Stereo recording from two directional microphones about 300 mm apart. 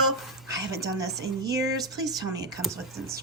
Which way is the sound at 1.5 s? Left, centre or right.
Centre.